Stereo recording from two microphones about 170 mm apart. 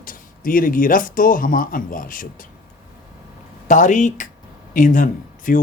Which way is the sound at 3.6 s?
45° left (ahead or behind).